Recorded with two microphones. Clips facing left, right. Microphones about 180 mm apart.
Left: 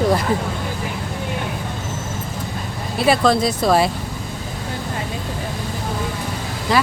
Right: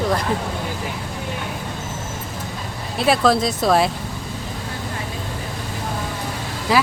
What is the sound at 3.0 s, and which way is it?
Speech, centre (ahead or behind).